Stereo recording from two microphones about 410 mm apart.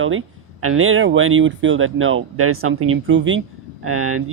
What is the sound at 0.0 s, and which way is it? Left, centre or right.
Speech, right.